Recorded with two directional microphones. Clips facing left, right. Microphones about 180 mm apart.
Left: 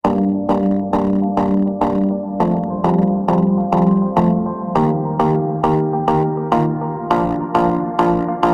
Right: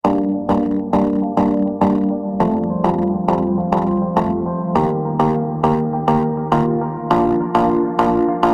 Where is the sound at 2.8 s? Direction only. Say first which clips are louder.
Left 3 dB; centre (ahead or behind).